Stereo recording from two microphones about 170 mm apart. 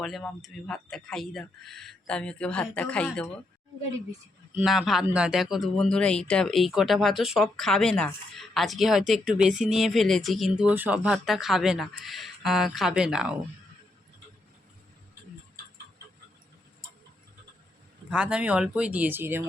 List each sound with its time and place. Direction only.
0.0 s speech: centre (ahead or behind)
4.5 s speech: 5° right (ahead or behind)
18.1 s speech: 5° right (ahead or behind)